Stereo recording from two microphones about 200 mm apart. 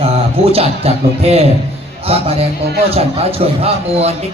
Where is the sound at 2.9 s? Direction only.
30° right (ahead or behind).